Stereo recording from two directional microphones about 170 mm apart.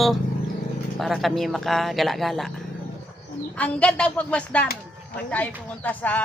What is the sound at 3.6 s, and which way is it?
Speech, 5° left (ahead or behind).